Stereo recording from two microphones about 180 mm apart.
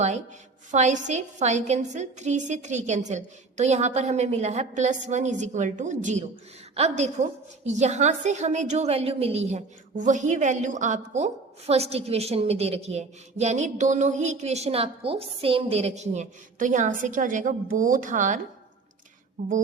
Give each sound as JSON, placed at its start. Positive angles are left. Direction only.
{"t": 0.7, "sound": "a woman's voice", "side_deg": -40}